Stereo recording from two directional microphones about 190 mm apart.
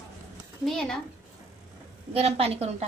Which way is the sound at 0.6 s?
5° left (ahead or behind).